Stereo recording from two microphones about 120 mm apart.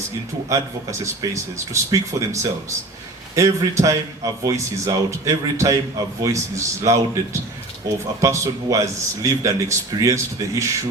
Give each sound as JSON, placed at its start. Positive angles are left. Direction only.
{"t": 0.5, "sound": "a man's voice", "side_deg": -25}
{"t": 8.2, "sound": "a man's voice", "side_deg": -25}